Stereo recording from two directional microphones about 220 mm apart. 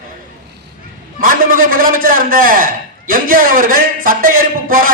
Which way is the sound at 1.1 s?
40° right (ahead or behind).